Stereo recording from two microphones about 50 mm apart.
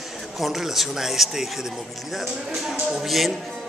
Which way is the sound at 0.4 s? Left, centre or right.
Centre.